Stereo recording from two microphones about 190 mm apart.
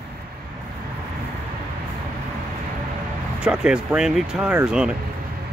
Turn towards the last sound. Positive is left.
turn(degrees=-5)  # may be behind; listen again after turning